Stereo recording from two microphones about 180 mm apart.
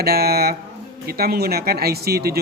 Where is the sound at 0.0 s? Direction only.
60° right (ahead or behind).